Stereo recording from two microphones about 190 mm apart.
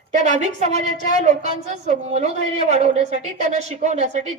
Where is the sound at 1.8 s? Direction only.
35° right (ahead or behind).